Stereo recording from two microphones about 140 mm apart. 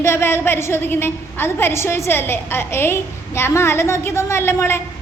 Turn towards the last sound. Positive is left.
turn(degrees=20)  # may be behind; listen again after turning